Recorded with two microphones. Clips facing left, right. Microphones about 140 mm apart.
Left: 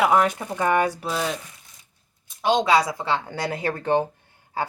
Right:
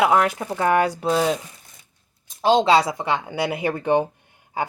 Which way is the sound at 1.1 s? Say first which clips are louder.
Right 6 dB; 30° right (ahead or behind).